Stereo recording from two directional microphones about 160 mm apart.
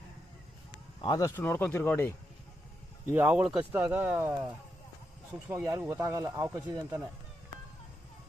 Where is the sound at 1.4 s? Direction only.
10° left (ahead or behind).